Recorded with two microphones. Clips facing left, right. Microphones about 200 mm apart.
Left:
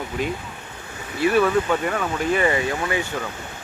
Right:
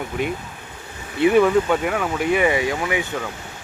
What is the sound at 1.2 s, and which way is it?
Speech, 20° right (ahead or behind).